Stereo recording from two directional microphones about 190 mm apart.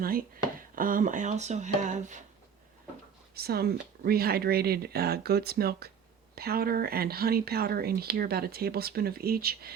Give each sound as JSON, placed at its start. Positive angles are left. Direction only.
{"t": 0.0, "sound": "speech", "side_deg": -50}
{"t": 3.3, "sound": "speech", "side_deg": -55}